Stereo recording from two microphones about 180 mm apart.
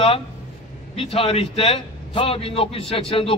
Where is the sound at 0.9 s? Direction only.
30° left (ahead or behind).